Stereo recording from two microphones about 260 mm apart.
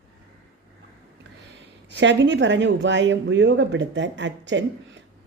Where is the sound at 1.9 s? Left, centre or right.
Right.